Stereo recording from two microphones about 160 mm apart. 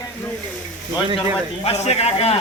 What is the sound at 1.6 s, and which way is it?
Speech, 40° left (ahead or behind).